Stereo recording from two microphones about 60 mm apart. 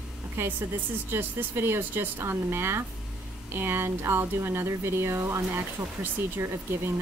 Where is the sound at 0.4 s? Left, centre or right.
Right.